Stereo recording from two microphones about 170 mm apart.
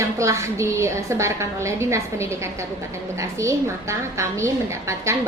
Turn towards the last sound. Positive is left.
turn(degrees=-15)  # may be behind; listen again after turning